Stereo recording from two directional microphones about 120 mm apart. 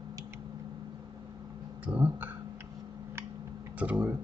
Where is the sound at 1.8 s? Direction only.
15° right (ahead or behind).